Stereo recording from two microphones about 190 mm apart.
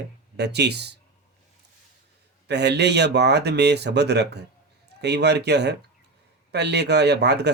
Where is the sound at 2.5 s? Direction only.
65° right (ahead or behind).